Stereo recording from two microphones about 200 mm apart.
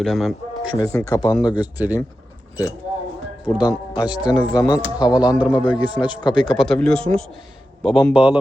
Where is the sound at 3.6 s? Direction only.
20° left (ahead or behind).